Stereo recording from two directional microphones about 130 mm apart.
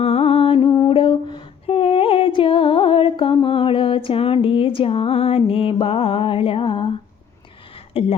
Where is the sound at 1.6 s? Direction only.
45° left (ahead or behind).